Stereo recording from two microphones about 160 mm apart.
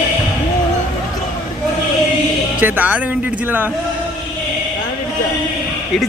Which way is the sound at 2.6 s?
10° right (ahead or behind).